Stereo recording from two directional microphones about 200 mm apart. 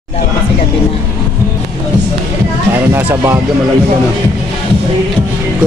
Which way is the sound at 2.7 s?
10° right (ahead or behind).